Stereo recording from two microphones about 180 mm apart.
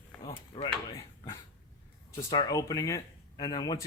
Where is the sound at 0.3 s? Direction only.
25° left (ahead or behind).